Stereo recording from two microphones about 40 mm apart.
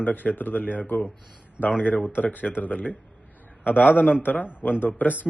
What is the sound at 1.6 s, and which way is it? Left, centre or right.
Speech, left.